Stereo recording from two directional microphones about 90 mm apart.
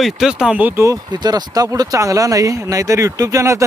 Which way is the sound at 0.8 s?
45° right (ahead or behind).